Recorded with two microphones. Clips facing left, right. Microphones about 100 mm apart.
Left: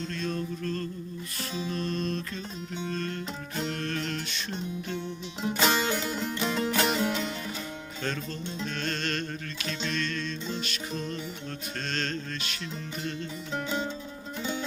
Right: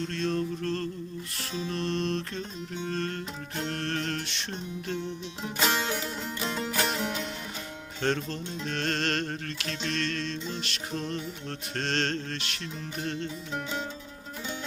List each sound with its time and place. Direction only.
0.1 s music: 75° right (ahead or behind)
1.7 s music: 80° right
5.4 s music: centre (ahead or behind)
8.0 s music: 70° right (ahead or behind); by 10.3 s 85° right
11.8 s music: 80° right